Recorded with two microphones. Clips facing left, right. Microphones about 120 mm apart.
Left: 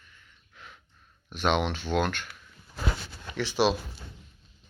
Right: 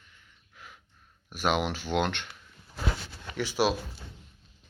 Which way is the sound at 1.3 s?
10° right (ahead or behind).